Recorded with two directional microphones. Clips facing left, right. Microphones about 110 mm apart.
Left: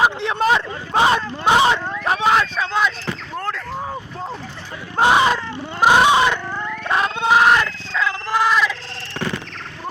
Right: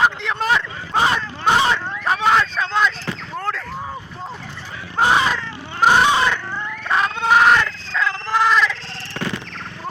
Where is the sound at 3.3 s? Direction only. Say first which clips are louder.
Right 1 dB; centre (ahead or behind).